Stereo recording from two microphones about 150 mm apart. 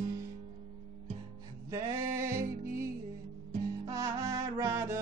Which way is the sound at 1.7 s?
20° right (ahead or behind).